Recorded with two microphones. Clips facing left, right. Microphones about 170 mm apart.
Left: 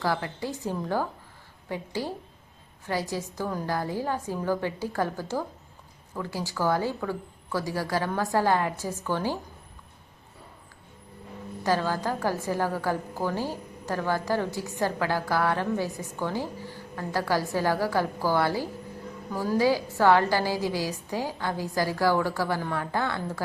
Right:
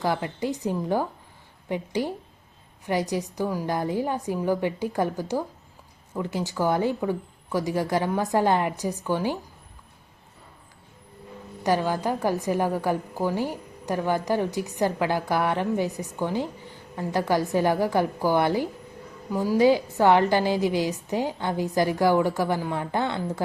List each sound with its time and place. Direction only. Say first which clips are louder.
0.0 s a woman's voice: right 3 dB; 20° right (ahead or behind)
11.6 s a woman's voice: right 2 dB; 15° right (ahead or behind)